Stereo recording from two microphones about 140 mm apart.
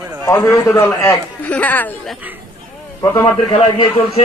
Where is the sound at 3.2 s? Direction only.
35° left (ahead or behind).